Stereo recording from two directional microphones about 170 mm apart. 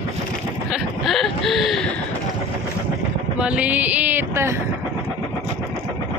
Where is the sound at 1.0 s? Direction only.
Centre (ahead or behind).